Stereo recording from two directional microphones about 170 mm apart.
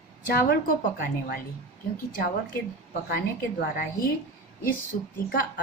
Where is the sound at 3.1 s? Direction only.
60° left (ahead or behind).